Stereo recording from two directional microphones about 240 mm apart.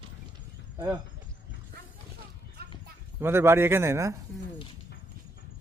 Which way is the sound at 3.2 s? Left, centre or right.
Centre.